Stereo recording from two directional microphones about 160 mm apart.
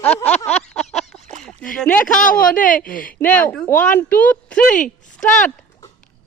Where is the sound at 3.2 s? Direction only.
10° left (ahead or behind).